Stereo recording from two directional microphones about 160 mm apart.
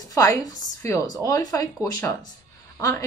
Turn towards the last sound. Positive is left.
turn(degrees=20)  # may be behind; listen again after turning